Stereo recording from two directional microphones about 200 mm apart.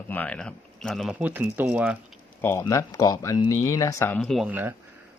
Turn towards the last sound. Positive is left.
turn(degrees=-10)  # may be behind; listen again after turning